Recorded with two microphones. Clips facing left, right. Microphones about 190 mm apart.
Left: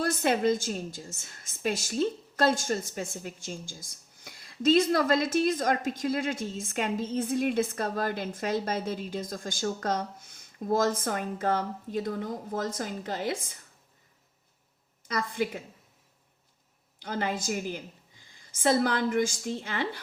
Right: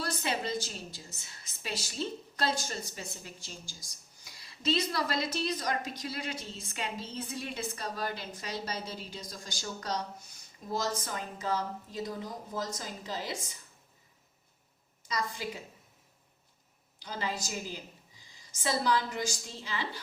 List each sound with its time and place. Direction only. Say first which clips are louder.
0.0 s a woman's voice: left 9 dB; 50° left (ahead or behind)
15.0 s a woman's voice: left 5 dB; 55° left (ahead or behind)
17.0 s a woman's voice: left 5 dB; 55° left (ahead or behind)